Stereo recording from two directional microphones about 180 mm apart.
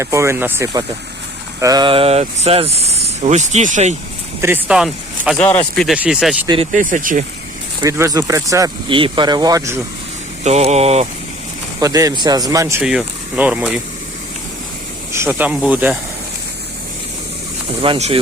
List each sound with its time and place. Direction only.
0.0 s speech: 15° right (ahead or behind); by 3.9 s 40° right (ahead or behind)
4.4 s speech: 10° right (ahead or behind)
6.7 s speech: 45° right (ahead or behind)
7.8 s speech: 15° right (ahead or behind)
8.9 s speech: 30° right (ahead or behind)
10.4 s speech: 40° right (ahead or behind)
11.8 s speech: 20° right (ahead or behind)
12.8 s speech: 5° right (ahead or behind)
15.1 s speech: 15° right (ahead or behind)
17.8 s speech: 30° right (ahead or behind)